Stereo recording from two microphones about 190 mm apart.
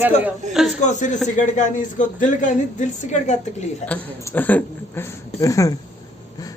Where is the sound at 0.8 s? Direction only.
40° left (ahead or behind).